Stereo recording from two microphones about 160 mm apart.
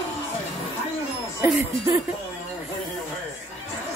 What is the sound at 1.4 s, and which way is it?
Speech, 10° right (ahead or behind).